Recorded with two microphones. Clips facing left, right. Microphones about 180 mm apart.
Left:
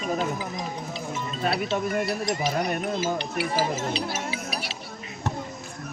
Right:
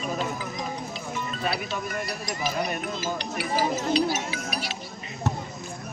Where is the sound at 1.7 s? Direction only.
25° left (ahead or behind).